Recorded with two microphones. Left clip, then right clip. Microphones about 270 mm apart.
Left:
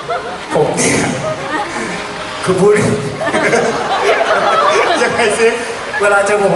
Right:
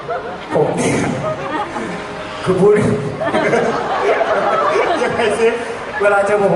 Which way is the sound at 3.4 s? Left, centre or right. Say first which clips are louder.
Left 3 dB; centre.